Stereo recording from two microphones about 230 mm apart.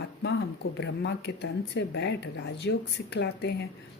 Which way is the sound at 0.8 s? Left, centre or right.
Left.